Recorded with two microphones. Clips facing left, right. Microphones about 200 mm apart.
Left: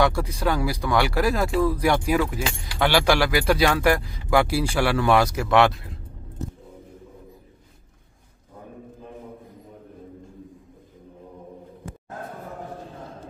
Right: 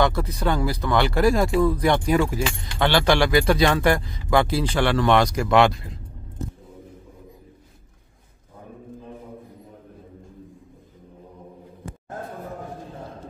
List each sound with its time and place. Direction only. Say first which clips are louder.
0.0 s speech: even; 10° left (ahead or behind)